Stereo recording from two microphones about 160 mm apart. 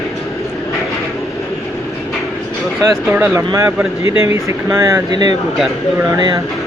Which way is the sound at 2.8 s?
10° right (ahead or behind).